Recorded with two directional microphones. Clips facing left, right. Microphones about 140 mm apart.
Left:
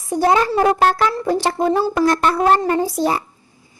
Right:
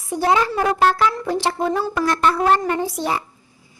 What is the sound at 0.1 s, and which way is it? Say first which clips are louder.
Speech: left 3 dB; 40° left (ahead or behind).